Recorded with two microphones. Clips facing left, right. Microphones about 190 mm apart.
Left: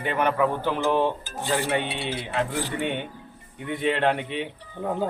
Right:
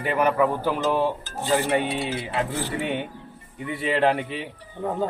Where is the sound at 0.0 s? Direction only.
5° right (ahead or behind).